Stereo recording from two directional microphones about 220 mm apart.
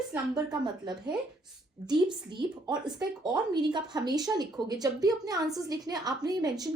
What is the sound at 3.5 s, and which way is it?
A woman's voice, 20° right (ahead or behind).